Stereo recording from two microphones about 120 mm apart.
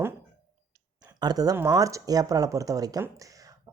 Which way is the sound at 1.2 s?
35° right (ahead or behind).